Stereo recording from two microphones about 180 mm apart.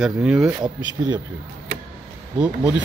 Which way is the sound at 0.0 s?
5° right (ahead or behind).